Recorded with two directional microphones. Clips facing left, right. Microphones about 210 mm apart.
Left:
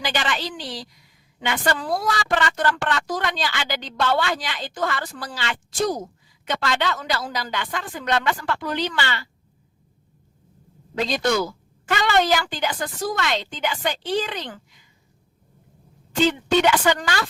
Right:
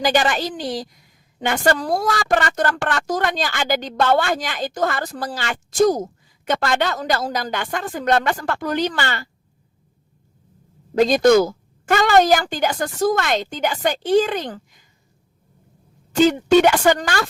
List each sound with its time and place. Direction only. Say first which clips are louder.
0.0 s a woman's voice: right 7 dB; 45° right (ahead or behind)
10.9 s a woman's voice: right 9 dB; 45° right (ahead or behind)
16.2 s a woman's voice: right 5 dB; 45° right (ahead or behind)